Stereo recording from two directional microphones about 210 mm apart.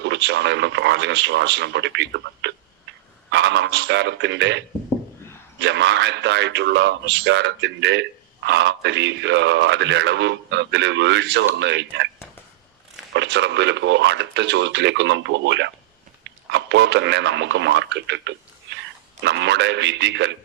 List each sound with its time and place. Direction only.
0.0 s speech: 60° right (ahead or behind)
13.1 s speech: 55° right (ahead or behind)